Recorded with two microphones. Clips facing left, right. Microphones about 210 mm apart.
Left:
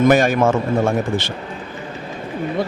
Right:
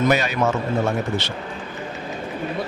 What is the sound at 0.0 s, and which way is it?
A man's voice, 50° left (ahead or behind).